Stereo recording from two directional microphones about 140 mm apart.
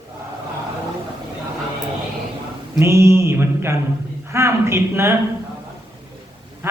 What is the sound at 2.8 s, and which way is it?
A woman's voice, 20° right (ahead or behind).